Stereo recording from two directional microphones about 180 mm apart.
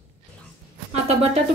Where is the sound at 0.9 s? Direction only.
35° right (ahead or behind).